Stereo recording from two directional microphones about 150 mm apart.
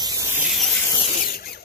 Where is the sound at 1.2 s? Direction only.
85° left.